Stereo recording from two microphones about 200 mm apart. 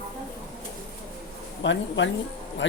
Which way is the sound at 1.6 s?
65° left (ahead or behind).